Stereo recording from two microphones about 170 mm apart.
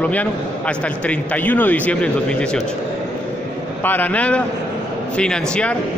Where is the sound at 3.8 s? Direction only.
10° left (ahead or behind).